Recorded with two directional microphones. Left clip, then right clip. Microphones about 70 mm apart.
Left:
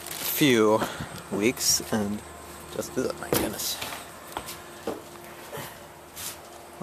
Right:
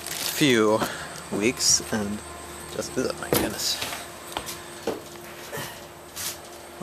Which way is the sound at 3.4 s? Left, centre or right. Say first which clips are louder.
Right 4 dB; left.